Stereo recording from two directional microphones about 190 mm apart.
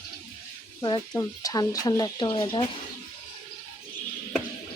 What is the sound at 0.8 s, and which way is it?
Speech, 25° left (ahead or behind).